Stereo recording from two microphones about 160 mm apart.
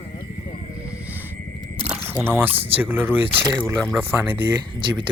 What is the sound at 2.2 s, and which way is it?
Speech, 15° right (ahead or behind).